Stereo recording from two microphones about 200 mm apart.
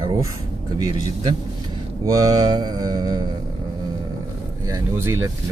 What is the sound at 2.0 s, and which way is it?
Mantra, 20° right (ahead or behind).